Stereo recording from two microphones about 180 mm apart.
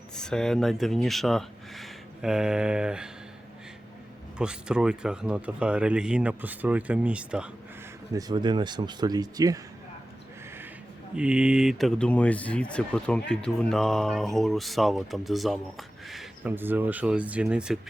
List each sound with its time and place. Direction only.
0.2 s speech: 5° left (ahead or behind)
4.4 s speech: 5° right (ahead or behind)
8.1 s speech: 25° right (ahead or behind)
11.1 s speech: 5° right (ahead or behind)